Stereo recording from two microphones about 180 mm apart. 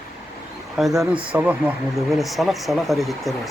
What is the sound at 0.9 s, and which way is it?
Speech, 25° right (ahead or behind).